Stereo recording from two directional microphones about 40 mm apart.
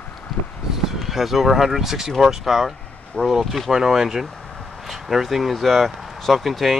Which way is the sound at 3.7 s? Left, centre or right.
Centre.